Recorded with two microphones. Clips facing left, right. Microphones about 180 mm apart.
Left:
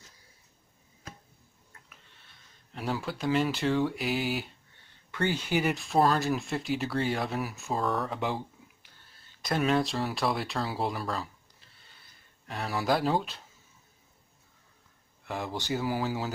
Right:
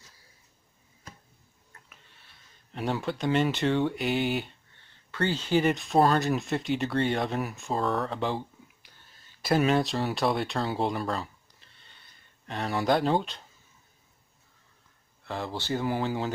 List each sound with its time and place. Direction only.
1.9 s speech: centre (ahead or behind)
5.1 s speech: 15° left (ahead or behind)
9.4 s speech: 5° right (ahead or behind)
15.2 s speech: 15° left (ahead or behind)